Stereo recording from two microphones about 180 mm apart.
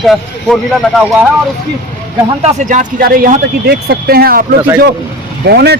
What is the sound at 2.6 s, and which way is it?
Speech, 45° right (ahead or behind).